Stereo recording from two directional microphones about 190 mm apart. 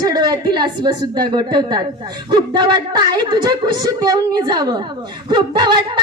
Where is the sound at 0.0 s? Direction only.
20° right (ahead or behind).